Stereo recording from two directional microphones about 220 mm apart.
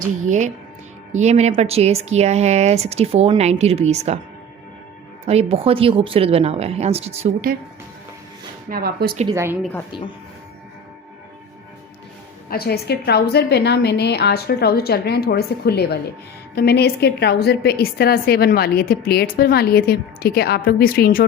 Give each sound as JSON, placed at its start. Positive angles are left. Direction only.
{"t": 0.3, "sound": "speech", "side_deg": -35}
{"t": 5.2, "sound": "speech", "side_deg": -25}
{"t": 8.7, "sound": "a woman's voice", "side_deg": -45}
{"t": 9.3, "sound": "a woman's voice", "side_deg": -10}
{"t": 12.5, "sound": "a woman's voice", "side_deg": 45}